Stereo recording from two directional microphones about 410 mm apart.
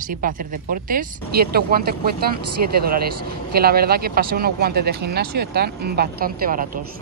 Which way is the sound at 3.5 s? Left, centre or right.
Right.